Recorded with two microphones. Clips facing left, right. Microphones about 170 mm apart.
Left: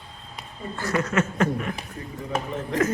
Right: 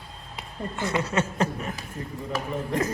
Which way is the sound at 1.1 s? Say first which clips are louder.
Left 3 dB; 35° right (ahead or behind).